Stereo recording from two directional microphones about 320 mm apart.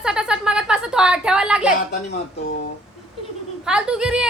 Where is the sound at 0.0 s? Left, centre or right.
Centre.